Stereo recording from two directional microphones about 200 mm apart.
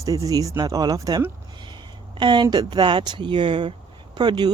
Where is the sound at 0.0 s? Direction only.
15° right (ahead or behind).